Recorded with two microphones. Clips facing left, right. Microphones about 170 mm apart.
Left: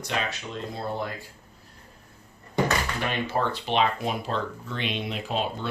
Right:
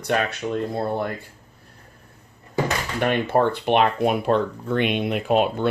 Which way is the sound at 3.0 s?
55° right (ahead or behind).